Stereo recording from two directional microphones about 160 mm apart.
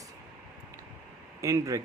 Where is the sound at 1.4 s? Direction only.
20° right (ahead or behind).